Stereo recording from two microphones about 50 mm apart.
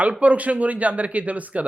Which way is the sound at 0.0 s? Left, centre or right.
Right.